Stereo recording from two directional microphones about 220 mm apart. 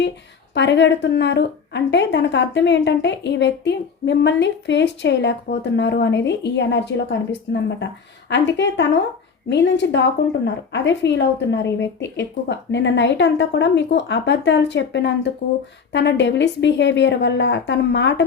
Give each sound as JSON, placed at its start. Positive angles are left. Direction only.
{"t": 0.5, "sound": "a woman's voice", "side_deg": 55}